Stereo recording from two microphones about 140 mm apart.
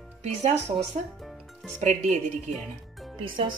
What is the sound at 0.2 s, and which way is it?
Speech, 50° right (ahead or behind).